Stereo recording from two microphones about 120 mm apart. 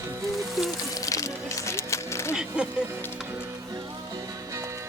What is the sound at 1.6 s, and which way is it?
Music, 25° left (ahead or behind).